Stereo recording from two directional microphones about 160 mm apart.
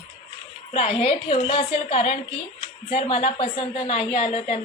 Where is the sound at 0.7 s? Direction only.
40° left (ahead or behind).